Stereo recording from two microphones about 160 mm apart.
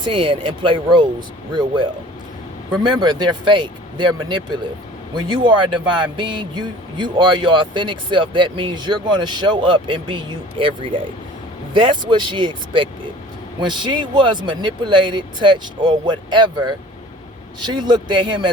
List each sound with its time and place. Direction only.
0.0 s speech: 30° right (ahead or behind)